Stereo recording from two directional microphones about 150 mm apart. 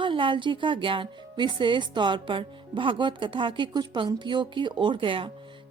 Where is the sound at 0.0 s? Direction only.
35° right (ahead or behind).